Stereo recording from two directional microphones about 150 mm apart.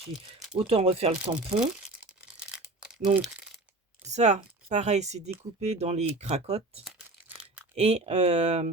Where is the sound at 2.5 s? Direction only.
5° right (ahead or behind).